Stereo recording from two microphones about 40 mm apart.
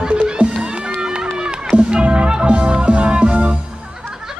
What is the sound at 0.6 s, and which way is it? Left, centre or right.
Crowd, right.